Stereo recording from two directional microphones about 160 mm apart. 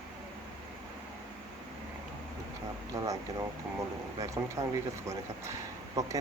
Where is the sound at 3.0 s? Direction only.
20° right (ahead or behind).